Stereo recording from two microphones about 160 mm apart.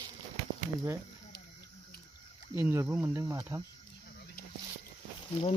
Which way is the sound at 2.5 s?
15° right (ahead or behind).